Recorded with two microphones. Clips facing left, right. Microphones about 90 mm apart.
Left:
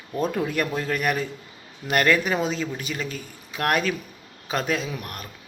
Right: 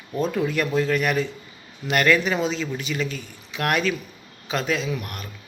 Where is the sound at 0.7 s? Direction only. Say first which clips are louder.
Right 3 dB; 40° left (ahead or behind).